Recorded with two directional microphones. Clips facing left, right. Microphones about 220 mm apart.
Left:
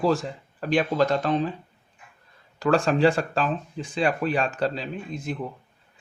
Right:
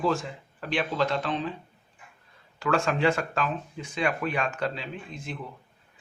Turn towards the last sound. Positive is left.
turn(degrees=40)  # may be behind; listen again after turning